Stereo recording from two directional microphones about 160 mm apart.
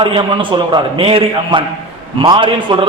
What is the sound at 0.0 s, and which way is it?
A man's voice, 30° right (ahead or behind).